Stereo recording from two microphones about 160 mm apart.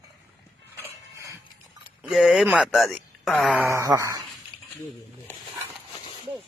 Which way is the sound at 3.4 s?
15° right (ahead or behind).